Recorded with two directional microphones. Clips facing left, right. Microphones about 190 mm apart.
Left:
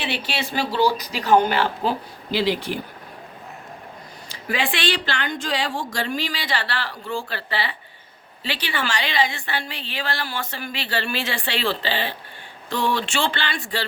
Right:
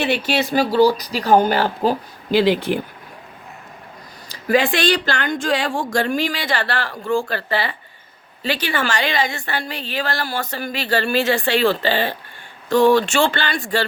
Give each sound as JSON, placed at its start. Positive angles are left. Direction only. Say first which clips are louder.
{"t": 0.0, "sound": "speech", "louder": "right 8 dB", "side_deg": -45}
{"t": 4.3, "sound": "a woman's voice", "louder": "right 8 dB", "side_deg": -40}